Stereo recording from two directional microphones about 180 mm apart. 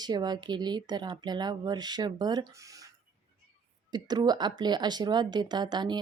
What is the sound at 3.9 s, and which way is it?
Speech, 25° right (ahead or behind).